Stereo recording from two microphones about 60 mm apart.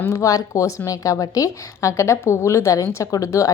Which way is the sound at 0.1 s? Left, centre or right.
Left.